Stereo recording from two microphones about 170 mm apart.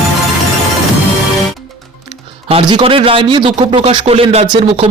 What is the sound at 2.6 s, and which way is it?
A man's voice, 30° right (ahead or behind).